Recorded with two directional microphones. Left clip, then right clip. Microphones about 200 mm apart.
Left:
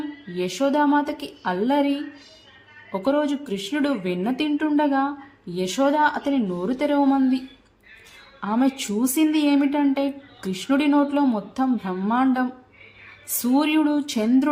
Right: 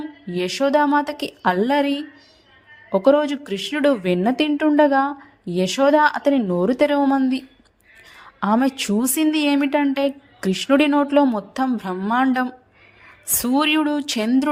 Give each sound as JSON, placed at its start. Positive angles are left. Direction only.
{"t": 0.3, "sound": "speech", "side_deg": -35}